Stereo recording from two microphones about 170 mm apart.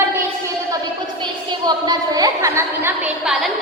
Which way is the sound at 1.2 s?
25° right (ahead or behind).